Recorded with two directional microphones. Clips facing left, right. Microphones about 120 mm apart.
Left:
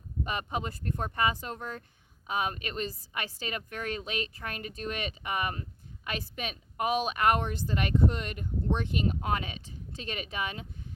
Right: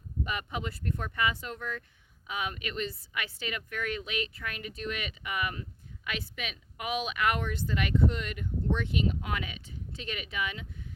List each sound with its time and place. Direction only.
0.3 s speech: 35° left (ahead or behind)